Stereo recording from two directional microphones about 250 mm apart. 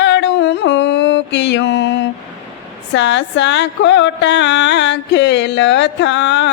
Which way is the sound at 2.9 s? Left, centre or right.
Left.